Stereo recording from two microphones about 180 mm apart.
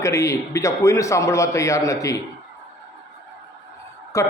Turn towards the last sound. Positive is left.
turn(degrees=15)  # may be behind; listen again after turning